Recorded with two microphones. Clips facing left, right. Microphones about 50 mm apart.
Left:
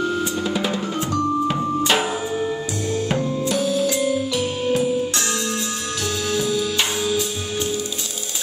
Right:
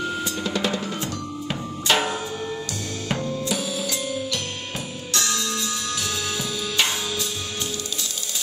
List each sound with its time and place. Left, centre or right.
0.4 s drum: centre
1.5 s music: centre
3.2 s drum kit: left
3.4 s music: centre
5.1 s music: left
6.3 s music: centre